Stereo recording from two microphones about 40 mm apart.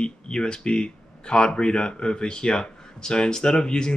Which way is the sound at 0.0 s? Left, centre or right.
Left.